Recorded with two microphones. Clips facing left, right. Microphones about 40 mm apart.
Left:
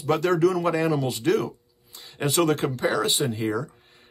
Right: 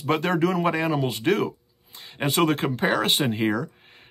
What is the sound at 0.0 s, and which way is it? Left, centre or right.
Speech, right.